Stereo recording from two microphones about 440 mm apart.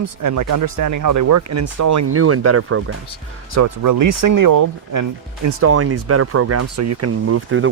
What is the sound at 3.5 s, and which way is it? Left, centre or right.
Speech, right.